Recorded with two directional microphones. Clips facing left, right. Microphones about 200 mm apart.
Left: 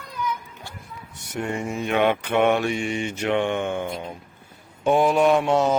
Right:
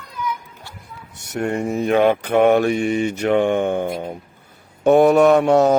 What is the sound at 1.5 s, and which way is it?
Mantra, 40° right (ahead or behind).